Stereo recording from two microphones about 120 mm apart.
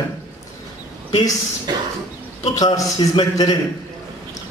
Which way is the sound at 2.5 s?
30° left (ahead or behind).